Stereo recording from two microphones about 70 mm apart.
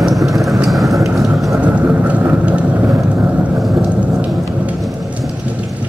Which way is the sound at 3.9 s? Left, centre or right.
Centre.